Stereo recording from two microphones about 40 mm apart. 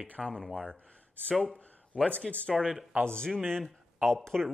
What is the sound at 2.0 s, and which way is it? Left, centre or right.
Speech, left.